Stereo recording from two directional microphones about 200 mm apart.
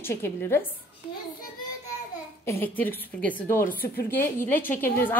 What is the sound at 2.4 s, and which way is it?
Speech, 10° left (ahead or behind).